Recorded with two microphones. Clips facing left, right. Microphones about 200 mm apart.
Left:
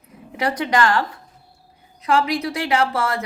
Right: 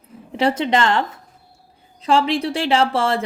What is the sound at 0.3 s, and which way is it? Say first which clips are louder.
A woman's voice: right 2 dB; 25° right (ahead or behind).